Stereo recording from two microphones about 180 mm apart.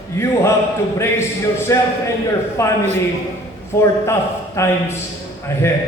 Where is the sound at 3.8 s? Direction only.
15° left (ahead or behind).